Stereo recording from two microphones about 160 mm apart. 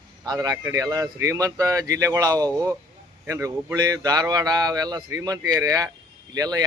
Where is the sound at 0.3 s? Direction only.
20° right (ahead or behind).